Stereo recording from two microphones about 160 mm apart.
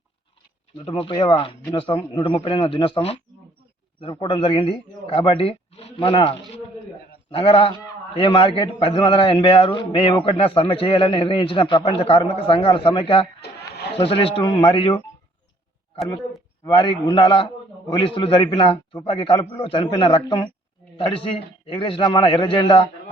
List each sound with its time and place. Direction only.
0.9 s a man's voice: 30° left (ahead or behind)
13.4 s a sound: 90° left
14.0 s a man's voice: 35° left (ahead or behind)
16.6 s a man's voice: 25° left (ahead or behind)